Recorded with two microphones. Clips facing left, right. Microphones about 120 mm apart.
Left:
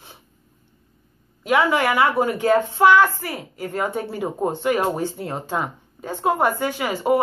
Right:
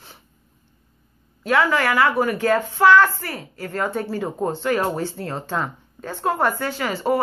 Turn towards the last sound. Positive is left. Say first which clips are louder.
# left 2 dB
turn(degrees=15)  # may be behind; listen again after turning